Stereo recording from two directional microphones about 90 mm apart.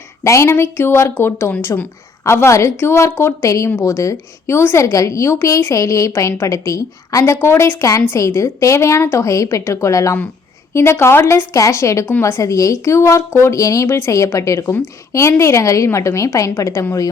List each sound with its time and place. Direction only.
0.3 s a woman's voice: 35° left (ahead or behind)